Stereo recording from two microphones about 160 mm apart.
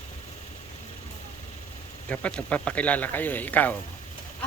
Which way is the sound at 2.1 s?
10° left (ahead or behind).